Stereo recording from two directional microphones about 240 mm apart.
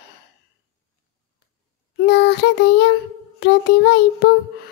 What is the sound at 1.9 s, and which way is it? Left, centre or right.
Child singing, left.